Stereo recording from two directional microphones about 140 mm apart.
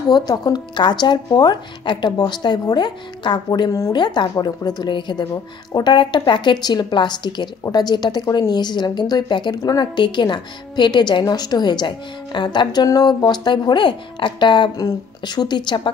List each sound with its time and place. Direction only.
0.1 s speech: 30° left (ahead or behind)